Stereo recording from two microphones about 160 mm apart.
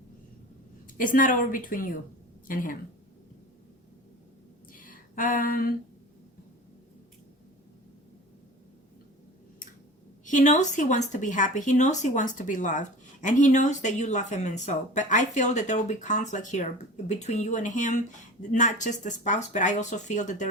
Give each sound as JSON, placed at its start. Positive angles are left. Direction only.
{"t": 0.9, "sound": "a woman's voice", "side_deg": 60}
{"t": 4.7, "sound": "a sound", "side_deg": 60}
{"t": 10.2, "sound": "speech", "side_deg": 50}